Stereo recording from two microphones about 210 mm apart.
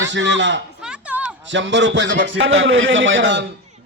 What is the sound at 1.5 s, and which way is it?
A man's voice, 60° right (ahead or behind).